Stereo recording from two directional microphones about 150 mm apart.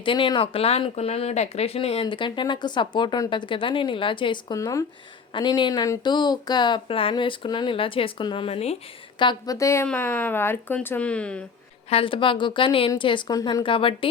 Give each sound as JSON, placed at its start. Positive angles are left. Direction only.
{"t": 0.0, "sound": "speech", "side_deg": 35}
{"t": 9.1, "sound": "a woman's voice", "side_deg": 25}
{"t": 11.9, "sound": "speech", "side_deg": 35}